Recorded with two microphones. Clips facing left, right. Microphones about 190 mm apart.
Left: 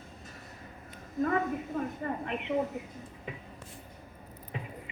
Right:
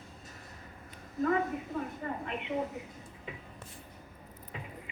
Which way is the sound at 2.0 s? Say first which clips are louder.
Left 3 dB; 35° left (ahead or behind).